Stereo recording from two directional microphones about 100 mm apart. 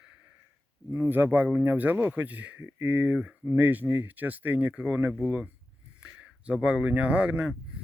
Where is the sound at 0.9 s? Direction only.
20° right (ahead or behind).